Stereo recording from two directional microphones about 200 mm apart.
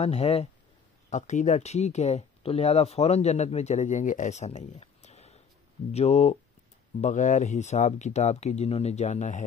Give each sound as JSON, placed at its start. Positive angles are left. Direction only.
{"t": 0.0, "sound": "speech", "side_deg": 30}